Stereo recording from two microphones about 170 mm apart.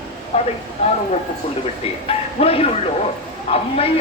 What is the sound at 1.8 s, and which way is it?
Speech, 35° left (ahead or behind).